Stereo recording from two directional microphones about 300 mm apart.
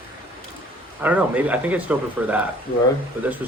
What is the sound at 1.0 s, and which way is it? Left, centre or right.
Speech, centre.